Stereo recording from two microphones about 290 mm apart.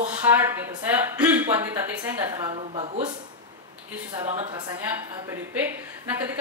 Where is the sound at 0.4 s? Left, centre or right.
Centre.